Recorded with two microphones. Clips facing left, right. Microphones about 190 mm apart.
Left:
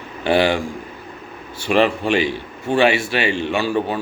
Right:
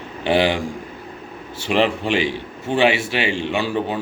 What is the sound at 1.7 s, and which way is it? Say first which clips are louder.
A man's voice: left 2 dB; 20° right (ahead or behind).